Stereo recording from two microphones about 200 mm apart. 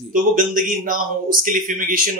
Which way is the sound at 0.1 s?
45° right (ahead or behind).